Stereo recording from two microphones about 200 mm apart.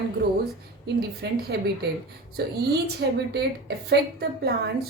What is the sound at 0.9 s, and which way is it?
Speech, 55° right (ahead or behind).